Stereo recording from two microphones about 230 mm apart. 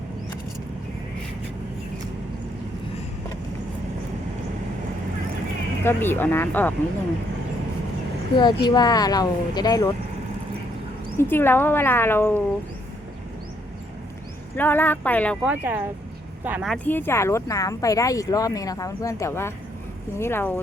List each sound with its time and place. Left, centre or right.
5.8 s speech: centre
8.4 s speech: centre
11.2 s speech: centre
14.5 s speech: centre
15.4 s speech: centre